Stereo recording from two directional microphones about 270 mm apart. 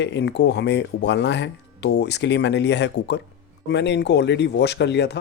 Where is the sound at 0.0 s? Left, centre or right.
Left.